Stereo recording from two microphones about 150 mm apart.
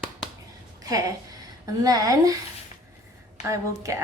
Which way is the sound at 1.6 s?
25° right (ahead or behind).